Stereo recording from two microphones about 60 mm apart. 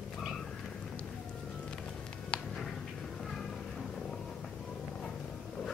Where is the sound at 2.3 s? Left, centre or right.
Centre.